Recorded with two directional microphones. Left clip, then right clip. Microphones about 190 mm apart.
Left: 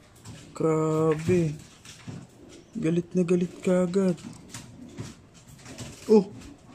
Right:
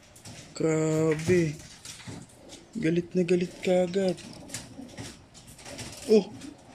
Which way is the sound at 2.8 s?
10° left (ahead or behind).